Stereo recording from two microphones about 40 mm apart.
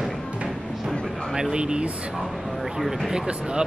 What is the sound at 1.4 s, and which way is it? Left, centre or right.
Speech, centre.